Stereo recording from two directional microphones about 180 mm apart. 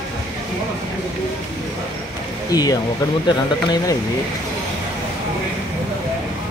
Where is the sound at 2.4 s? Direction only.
20° left (ahead or behind).